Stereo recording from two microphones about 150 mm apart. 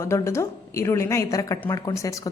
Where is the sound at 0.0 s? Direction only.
20° left (ahead or behind).